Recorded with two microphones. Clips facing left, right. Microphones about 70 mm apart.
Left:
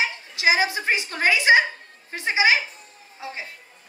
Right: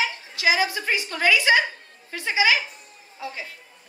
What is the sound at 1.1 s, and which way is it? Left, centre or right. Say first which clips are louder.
A woman's voice: left 1 dB; left.